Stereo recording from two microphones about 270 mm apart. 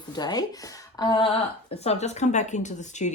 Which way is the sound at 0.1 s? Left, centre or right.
Centre.